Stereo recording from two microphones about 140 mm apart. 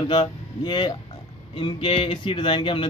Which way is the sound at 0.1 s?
35° left (ahead or behind).